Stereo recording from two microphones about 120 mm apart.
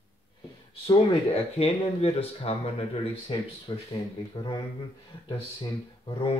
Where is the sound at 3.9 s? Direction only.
35° left (ahead or behind).